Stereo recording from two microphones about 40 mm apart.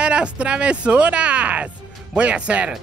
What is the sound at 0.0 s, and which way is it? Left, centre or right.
Speech, right.